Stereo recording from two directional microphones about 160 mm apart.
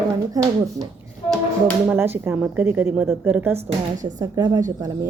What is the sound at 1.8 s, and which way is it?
A woman's voice, 15° right (ahead or behind).